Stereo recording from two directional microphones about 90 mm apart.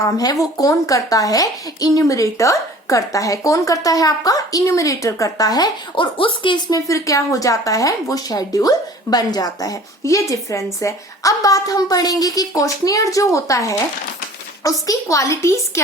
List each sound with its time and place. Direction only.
0.0 s a woman's voice: 40° left (ahead or behind)
5.9 s speech: 75° left (ahead or behind)
6.7 s a woman's voice: 40° left (ahead or behind)